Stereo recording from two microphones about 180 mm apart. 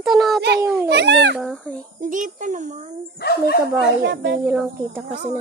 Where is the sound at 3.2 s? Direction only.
60° left (ahead or behind).